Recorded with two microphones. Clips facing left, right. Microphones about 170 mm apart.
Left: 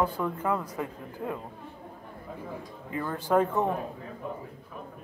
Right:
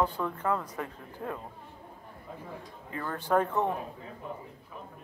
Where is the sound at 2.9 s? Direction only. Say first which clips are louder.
Left 2 dB; 15° left (ahead or behind).